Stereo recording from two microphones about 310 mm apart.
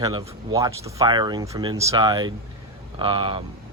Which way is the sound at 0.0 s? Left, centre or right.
Centre.